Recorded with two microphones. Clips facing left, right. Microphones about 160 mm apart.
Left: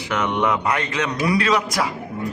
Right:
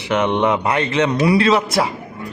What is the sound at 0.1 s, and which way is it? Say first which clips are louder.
A man's voice: right 4 dB; 25° right (ahead or behind).